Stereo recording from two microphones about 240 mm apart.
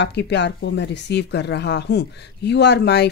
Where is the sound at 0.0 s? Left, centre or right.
Left.